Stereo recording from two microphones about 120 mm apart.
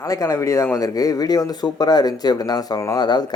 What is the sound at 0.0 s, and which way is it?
Speech, 30° left (ahead or behind).